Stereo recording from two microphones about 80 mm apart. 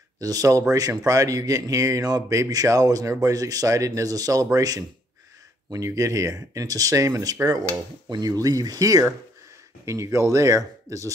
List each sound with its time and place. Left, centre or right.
0.2 s speech: right